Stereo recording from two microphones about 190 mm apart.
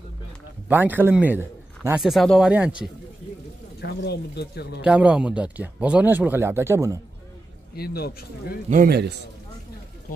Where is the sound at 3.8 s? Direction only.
60° left (ahead or behind).